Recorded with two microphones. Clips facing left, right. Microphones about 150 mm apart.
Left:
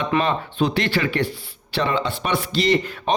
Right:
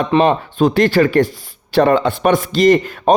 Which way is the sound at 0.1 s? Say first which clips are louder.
Right 10 dB; 40° right (ahead or behind).